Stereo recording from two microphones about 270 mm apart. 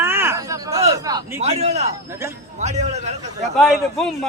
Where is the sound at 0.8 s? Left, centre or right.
Right.